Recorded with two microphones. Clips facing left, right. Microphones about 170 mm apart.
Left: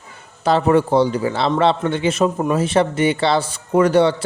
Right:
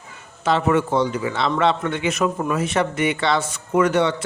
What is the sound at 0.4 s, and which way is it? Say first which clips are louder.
A man's voice: left 4 dB; 35° left (ahead or behind).